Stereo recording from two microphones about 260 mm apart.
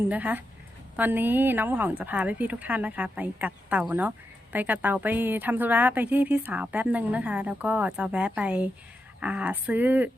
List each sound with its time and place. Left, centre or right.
0.1 s a woman's voice: centre